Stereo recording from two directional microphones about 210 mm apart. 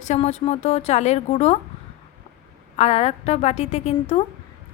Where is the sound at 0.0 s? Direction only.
30° left (ahead or behind).